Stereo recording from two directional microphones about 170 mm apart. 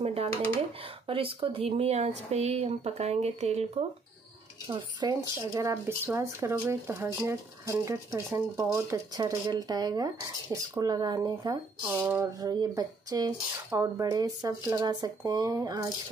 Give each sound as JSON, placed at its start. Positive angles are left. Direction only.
{"t": 0.0, "sound": "speech", "side_deg": -35}
{"t": 4.6, "sound": "speech", "side_deg": -30}
{"t": 11.8, "sound": "speech", "side_deg": -10}